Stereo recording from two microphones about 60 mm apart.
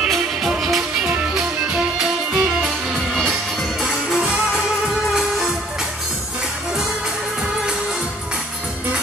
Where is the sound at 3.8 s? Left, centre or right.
Centre.